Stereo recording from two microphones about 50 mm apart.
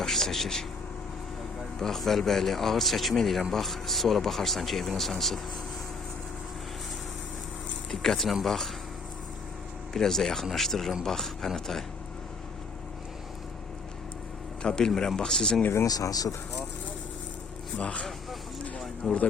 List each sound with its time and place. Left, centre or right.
0.0 s a sound: centre
1.8 s speech: centre
7.9 s speech: centre
9.9 s speech: centre
14.6 s speech: centre
17.7 s speech: left
19.0 s speech: centre